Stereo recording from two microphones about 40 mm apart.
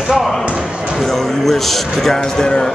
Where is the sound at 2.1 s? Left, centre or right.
Centre.